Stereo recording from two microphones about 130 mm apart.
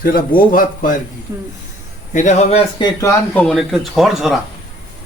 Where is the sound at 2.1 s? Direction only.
70° left (ahead or behind).